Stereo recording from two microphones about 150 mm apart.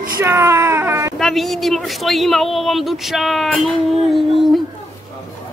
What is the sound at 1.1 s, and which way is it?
Speech, centre (ahead or behind).